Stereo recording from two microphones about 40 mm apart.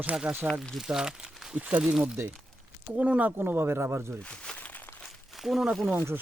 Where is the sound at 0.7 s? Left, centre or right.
Centre.